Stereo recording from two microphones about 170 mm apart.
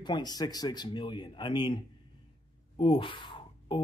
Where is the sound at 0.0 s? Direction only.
25° left (ahead or behind).